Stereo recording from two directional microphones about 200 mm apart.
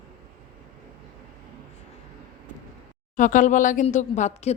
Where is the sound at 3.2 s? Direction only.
40° left (ahead or behind).